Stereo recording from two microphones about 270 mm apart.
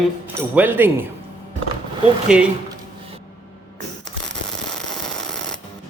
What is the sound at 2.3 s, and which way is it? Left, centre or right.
Speech, centre.